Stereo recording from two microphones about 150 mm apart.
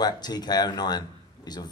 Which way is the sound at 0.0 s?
25° left (ahead or behind).